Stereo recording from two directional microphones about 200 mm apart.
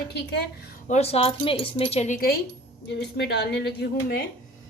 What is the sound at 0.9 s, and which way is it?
Speech, 30° left (ahead or behind).